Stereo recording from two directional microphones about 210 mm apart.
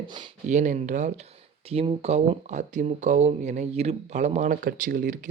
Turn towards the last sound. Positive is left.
turn(degrees=-35)  # may be behind; listen again after turning